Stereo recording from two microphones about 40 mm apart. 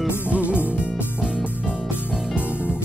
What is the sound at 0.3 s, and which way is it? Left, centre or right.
Music, right.